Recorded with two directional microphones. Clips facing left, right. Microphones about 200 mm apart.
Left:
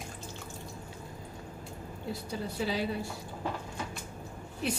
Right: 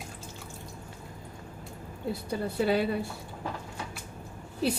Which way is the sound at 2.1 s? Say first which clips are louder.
Right 5 dB; 55° right (ahead or behind).